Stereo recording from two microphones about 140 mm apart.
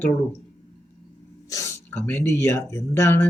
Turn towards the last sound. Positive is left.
turn(degrees=15)  # may be behind; listen again after turning